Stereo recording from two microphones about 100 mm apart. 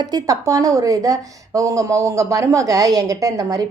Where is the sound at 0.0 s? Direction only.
40° right (ahead or behind).